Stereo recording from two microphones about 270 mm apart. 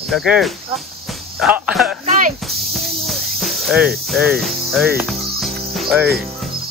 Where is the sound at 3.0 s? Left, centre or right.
Centre.